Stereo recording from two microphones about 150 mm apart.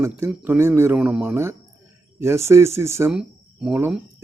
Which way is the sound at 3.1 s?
5° right (ahead or behind).